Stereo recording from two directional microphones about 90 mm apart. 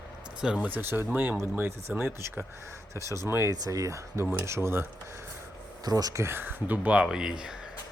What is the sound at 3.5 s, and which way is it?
Speech, 40° right (ahead or behind).